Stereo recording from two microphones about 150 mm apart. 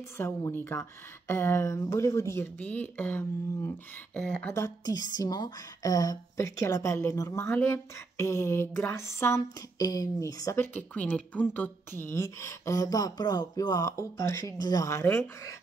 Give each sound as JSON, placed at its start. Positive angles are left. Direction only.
{"t": 0.2, "sound": "speech", "side_deg": 15}